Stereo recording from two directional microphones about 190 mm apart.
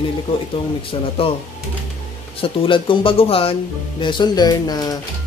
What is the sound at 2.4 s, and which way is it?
Speech, 30° left (ahead or behind).